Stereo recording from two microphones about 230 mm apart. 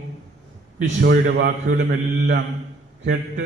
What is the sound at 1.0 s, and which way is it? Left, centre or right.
Speech, right.